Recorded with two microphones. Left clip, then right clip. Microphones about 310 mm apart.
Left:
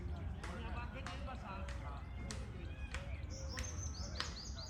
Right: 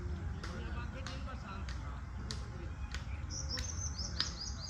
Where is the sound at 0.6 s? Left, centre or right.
Left.